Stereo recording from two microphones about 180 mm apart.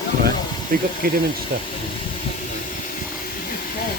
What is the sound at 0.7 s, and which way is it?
Speech, 55° right (ahead or behind).